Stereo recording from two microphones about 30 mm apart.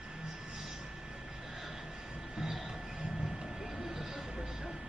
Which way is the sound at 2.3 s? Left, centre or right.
Centre.